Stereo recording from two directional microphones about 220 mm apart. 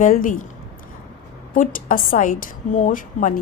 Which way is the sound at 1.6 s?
40° left (ahead or behind).